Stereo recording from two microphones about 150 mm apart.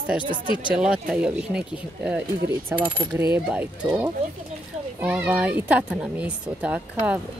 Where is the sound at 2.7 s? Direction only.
10° right (ahead or behind).